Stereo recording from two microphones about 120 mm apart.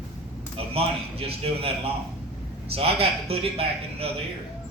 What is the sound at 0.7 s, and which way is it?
Speech, 55° right (ahead or behind).